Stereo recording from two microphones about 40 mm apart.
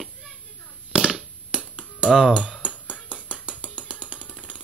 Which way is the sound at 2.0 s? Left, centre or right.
Centre.